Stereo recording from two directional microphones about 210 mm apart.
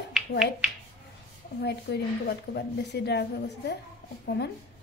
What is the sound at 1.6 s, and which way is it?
A woman's voice, 50° left (ahead or behind).